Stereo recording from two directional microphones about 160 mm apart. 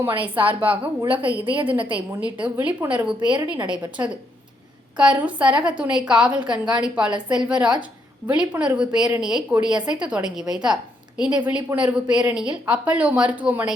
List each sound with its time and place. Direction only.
0.3 s a woman's voice: 10° right (ahead or behind)
1.7 s a woman's voice: 30° right (ahead or behind)
2.4 s a woman's voice: 10° right (ahead or behind)
3.2 s a woman's voice: 30° right (ahead or behind)
4.0 s a woman's voice: 15° right (ahead or behind)